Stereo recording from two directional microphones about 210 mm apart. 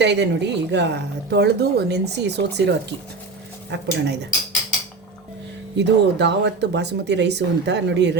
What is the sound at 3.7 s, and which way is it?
Speech, 55° right (ahead or behind).